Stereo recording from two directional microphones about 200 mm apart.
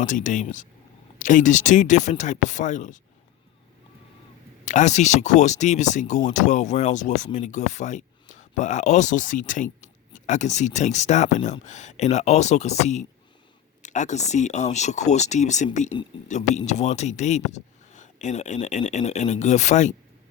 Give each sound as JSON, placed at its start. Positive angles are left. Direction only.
{"t": 0.0, "sound": "speech", "side_deg": 40}
{"t": 4.6, "sound": "speech", "side_deg": 40}